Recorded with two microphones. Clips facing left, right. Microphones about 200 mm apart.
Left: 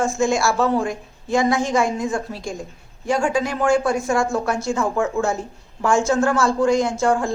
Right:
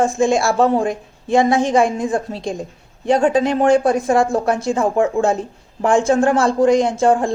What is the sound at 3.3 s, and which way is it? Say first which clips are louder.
Speech: right 5 dB; 20° right (ahead or behind).